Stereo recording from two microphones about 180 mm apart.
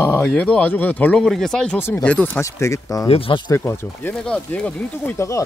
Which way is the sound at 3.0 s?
30° left (ahead or behind).